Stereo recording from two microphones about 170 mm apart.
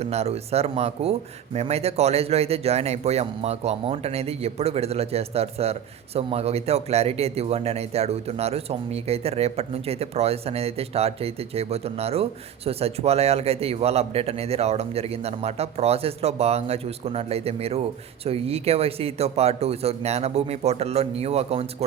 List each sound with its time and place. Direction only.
0.0 s a man's voice: 40° right (ahead or behind)